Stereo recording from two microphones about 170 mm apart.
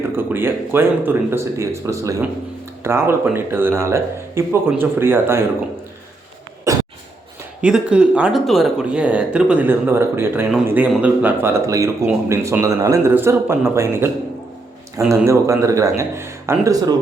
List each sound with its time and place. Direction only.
0.2 s speech: 15° right (ahead or behind)
6.7 s a sound: 20° right (ahead or behind)
7.6 s a man's voice: 5° right (ahead or behind)